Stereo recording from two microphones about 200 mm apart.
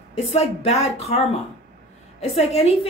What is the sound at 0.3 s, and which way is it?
A woman's voice, 30° left (ahead or behind).